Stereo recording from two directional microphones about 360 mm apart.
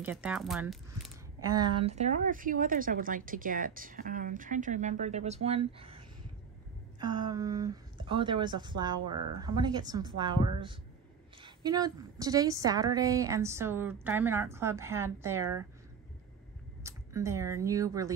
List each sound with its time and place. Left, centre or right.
0.0 s speech: centre
1.5 s a woman's voice: centre
16.8 s speech: centre